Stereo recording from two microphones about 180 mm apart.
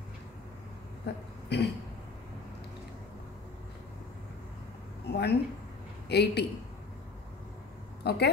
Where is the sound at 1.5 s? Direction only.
70° left (ahead or behind).